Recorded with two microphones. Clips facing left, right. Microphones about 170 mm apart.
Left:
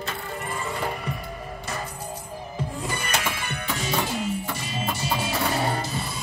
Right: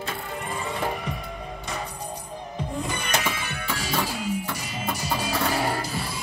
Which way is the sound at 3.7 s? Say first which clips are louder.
Left 2 dB; 25° left (ahead or behind).